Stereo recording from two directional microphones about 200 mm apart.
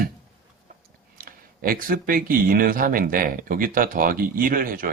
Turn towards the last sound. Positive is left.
turn(degrees=-45)  # may be behind; listen again after turning